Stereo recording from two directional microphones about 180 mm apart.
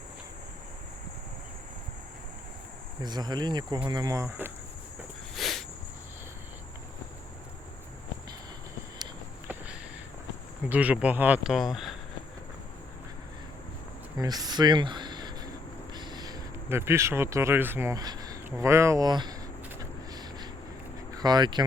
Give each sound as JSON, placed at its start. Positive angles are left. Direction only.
{"t": 3.0, "sound": "speech", "side_deg": -25}
{"t": 5.3, "sound": "a sound", "side_deg": 0}
{"t": 10.7, "sound": "speech", "side_deg": -10}
{"t": 14.2, "sound": "speech", "side_deg": -20}
{"t": 19.8, "sound": "a sound", "side_deg": -20}
{"t": 21.1, "sound": "speech", "side_deg": -20}